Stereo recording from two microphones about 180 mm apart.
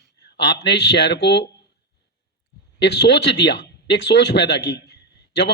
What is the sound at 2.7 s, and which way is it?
Speech, 70° left (ahead or behind).